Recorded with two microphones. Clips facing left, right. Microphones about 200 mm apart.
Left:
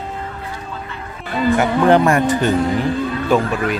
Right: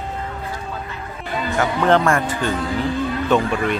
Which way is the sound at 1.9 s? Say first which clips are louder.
Left 3 dB; 20° left (ahead or behind).